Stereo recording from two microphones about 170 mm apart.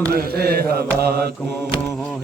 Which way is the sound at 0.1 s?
65° right (ahead or behind).